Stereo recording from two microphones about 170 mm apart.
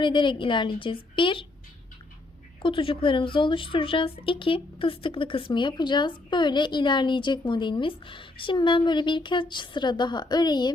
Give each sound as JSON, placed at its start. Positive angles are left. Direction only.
{"t": 0.0, "sound": "a woman's voice", "side_deg": 30}
{"t": 2.6, "sound": "a woman's voice", "side_deg": 30}